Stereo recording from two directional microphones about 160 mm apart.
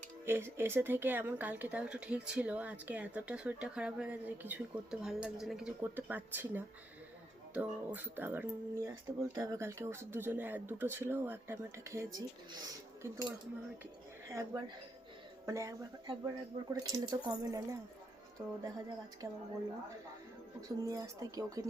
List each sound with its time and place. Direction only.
0.3 s speech: 15° right (ahead or behind)
14.3 s speech: 20° right (ahead or behind)
20.6 s speech: 20° right (ahead or behind)